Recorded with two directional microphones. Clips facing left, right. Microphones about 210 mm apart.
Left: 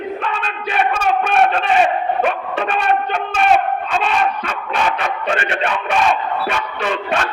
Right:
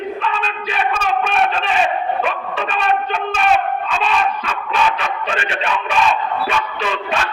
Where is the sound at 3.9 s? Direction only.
55° left (ahead or behind).